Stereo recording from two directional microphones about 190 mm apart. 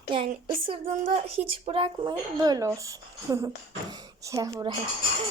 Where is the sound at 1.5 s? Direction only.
30° right (ahead or behind).